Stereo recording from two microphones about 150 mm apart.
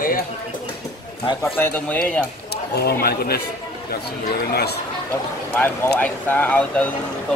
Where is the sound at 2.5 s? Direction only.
90° left.